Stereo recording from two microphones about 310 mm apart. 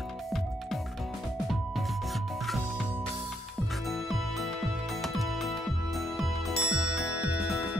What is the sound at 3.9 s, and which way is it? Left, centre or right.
Music, centre.